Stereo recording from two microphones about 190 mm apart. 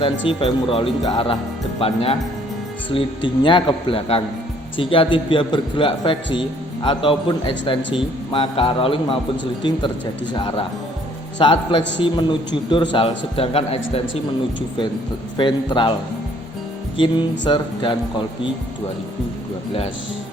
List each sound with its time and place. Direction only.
0.3 s a man's voice: 30° left (ahead or behind)
11.8 s a man's voice: 70° left (ahead or behind)
12.0 s a man's voice: 25° left (ahead or behind)
15.4 s speech: 25° left (ahead or behind)
17.0 s speech: 25° left (ahead or behind)